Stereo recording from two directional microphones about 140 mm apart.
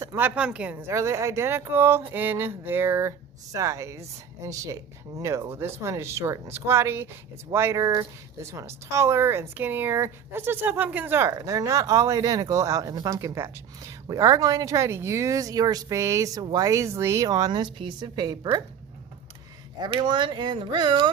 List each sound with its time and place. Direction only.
0.0 s speech: 15° right (ahead or behind)
19.9 s speech: 35° right (ahead or behind)